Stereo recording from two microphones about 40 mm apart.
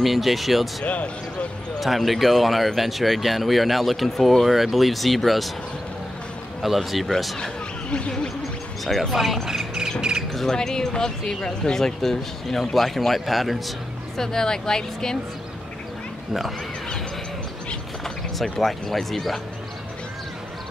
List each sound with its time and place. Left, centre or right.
0.0 s speech: centre
0.8 s speech: left
1.8 s speech: centre
6.6 s speech: centre
8.8 s speech: centre
10.5 s speech: centre
14.1 s speech: centre
18.0 s speech: centre